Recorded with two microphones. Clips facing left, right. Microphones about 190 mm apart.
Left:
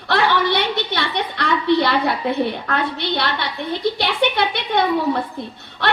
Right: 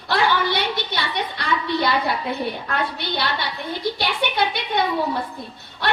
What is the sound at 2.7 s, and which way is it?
Speech, 60° left (ahead or behind).